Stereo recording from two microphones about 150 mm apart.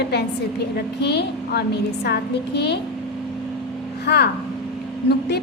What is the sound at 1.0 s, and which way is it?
A woman's voice, 90° left.